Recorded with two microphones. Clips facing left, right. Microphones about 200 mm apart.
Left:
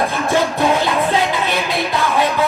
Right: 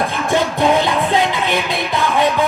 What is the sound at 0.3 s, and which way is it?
Music, 20° right (ahead or behind).